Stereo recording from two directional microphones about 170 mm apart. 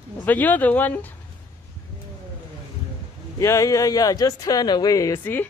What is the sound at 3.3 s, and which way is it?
Speech, 20° left (ahead or behind).